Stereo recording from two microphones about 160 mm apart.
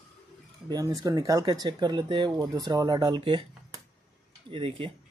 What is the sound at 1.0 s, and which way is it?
Speech, 20° right (ahead or behind).